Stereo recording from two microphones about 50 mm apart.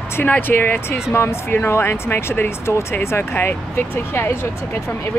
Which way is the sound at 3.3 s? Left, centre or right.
Left.